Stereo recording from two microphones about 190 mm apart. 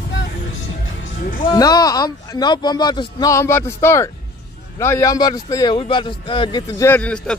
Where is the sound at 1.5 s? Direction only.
20° left (ahead or behind).